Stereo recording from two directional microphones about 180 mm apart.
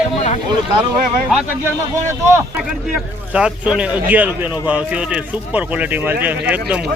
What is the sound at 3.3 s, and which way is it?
A man's voice, 5° right (ahead or behind).